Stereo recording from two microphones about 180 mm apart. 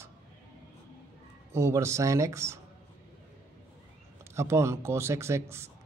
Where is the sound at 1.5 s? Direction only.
15° right (ahead or behind).